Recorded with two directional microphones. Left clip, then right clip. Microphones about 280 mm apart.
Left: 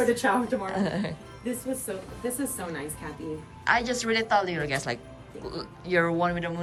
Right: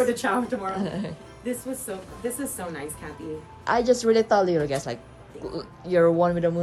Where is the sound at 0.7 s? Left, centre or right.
Centre.